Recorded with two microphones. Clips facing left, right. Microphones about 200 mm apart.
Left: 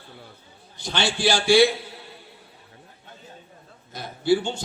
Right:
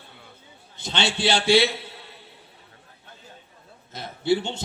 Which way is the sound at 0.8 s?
25° right (ahead or behind).